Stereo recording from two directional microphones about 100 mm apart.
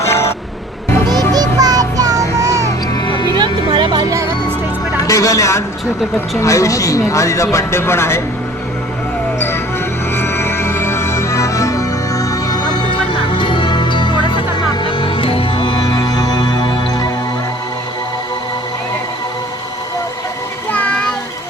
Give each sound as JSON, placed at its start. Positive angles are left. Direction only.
{"t": 0.0, "sound": "music", "side_deg": 25}
{"t": 1.3, "sound": "music", "side_deg": -40}
{"t": 2.9, "sound": "music", "side_deg": 50}
{"t": 3.3, "sound": "music", "side_deg": -50}
{"t": 4.9, "sound": "speech", "side_deg": 35}
{"t": 10.2, "sound": "music", "side_deg": 25}
{"t": 20.7, "sound": "child singing", "side_deg": 15}